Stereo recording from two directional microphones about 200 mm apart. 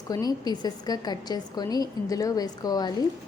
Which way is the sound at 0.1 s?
20° left (ahead or behind).